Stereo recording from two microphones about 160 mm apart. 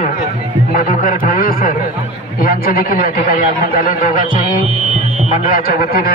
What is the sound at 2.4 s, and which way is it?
A man's voice, 70° left (ahead or behind).